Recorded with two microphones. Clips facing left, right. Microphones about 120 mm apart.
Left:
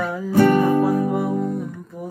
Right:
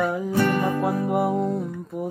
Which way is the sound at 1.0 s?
25° right (ahead or behind).